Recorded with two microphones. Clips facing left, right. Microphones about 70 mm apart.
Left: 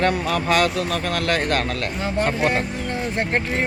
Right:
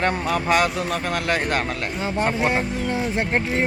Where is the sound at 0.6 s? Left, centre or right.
Centre.